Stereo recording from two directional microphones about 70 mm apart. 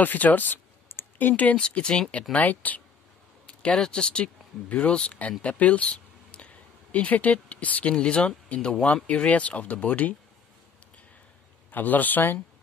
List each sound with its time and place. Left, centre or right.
0.0 s a man's voice: left
11.7 s a man's voice: left